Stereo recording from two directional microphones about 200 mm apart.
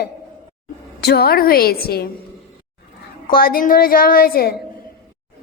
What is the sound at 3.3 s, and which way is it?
A woman's voice, 45° left (ahead or behind).